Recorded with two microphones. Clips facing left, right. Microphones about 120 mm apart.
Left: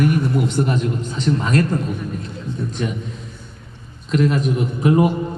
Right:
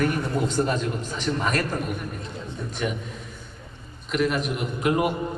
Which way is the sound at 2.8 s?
30° left (ahead or behind).